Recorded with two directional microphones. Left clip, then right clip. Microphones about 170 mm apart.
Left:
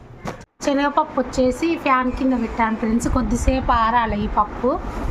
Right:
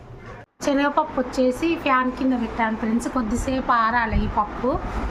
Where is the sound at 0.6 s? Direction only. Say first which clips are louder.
Left 2 dB; 10° left (ahead or behind).